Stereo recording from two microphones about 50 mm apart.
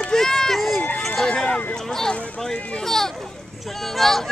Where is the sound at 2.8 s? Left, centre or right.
Centre.